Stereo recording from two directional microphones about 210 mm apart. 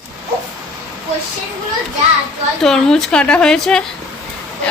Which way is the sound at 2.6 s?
Centre (ahead or behind).